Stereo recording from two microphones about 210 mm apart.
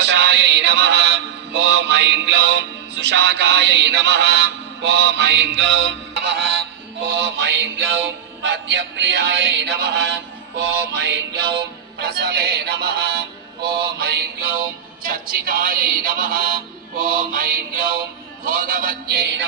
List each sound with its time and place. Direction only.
0.0 s mantra: 55° right (ahead or behind)
10.6 s music: 55° right (ahead or behind)
17.3 s mantra: 40° right (ahead or behind)
18.4 s a sound: 40° right (ahead or behind)